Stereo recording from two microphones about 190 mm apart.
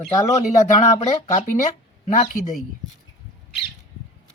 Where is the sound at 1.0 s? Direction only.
35° left (ahead or behind).